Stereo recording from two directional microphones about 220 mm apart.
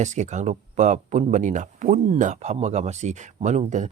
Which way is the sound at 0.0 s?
30° right (ahead or behind).